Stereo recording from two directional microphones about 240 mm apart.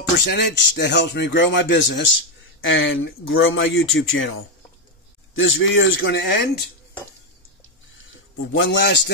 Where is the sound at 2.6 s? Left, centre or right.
Left.